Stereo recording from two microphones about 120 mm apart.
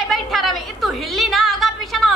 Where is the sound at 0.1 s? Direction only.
Centre (ahead or behind).